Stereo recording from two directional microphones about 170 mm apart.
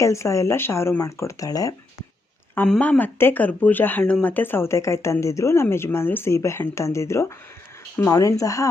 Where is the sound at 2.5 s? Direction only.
5° left (ahead or behind).